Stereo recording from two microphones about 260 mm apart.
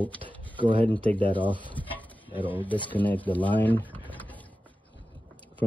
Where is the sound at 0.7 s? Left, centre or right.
Centre.